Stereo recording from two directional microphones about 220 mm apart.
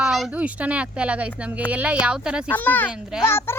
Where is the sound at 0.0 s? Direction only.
Centre (ahead or behind).